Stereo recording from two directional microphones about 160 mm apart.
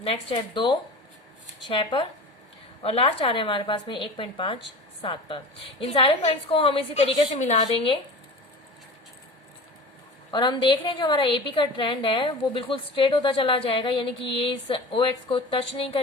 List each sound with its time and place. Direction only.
0.0 s a woman's voice: 35° left (ahead or behind)
5.8 s a woman's voice: 35° left (ahead or behind)
10.3 s a woman's voice: 30° left (ahead or behind)